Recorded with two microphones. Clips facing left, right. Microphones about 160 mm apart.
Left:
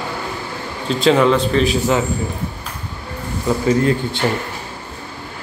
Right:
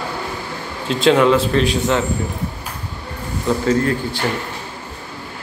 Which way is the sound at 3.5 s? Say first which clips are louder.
Even; 5° left (ahead or behind).